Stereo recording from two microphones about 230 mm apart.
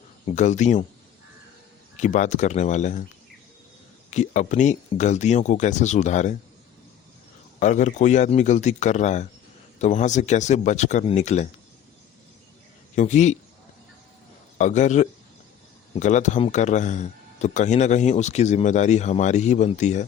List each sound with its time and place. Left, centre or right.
0.3 s speech: left
2.0 s speech: left
4.1 s speech: left
7.6 s speech: left
13.0 s speech: left
14.6 s speech: left